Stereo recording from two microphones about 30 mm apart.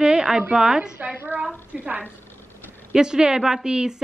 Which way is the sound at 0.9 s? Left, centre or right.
Right.